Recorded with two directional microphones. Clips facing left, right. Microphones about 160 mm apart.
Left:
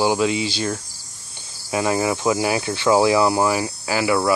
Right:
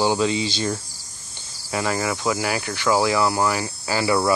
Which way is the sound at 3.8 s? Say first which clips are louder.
Right 1 dB; 10° left (ahead or behind).